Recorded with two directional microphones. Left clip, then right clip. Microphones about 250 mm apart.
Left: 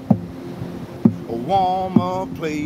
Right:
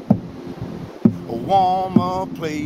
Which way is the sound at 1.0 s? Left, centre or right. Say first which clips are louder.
Even; centre.